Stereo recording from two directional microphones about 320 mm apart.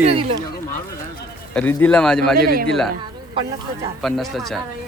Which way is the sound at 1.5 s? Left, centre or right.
Centre.